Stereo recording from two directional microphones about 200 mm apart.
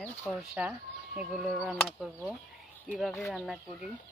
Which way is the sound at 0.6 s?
5° right (ahead or behind).